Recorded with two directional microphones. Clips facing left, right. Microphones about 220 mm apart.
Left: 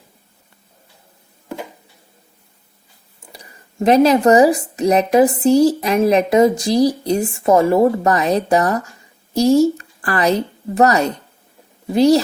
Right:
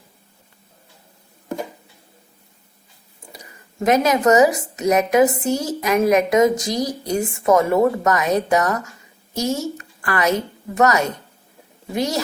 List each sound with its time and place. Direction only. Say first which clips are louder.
3.8 s a woman's voice: left 5 dB; 30° left (ahead or behind)